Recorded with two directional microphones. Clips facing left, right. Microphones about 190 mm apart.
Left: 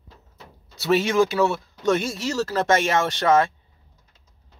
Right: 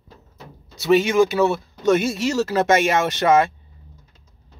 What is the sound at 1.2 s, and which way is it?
Speech, 20° right (ahead or behind).